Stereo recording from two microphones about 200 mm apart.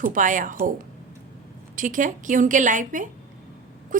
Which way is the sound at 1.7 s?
40° right (ahead or behind).